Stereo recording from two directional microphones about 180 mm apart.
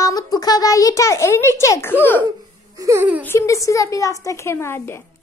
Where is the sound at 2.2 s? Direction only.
20° right (ahead or behind).